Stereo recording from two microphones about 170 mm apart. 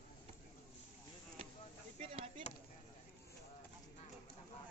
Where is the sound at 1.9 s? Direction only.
35° right (ahead or behind).